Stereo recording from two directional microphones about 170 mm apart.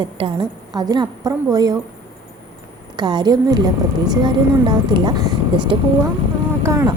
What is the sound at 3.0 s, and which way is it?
A woman's voice, 25° right (ahead or behind).